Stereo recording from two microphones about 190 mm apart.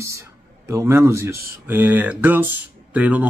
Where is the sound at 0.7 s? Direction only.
15° right (ahead or behind).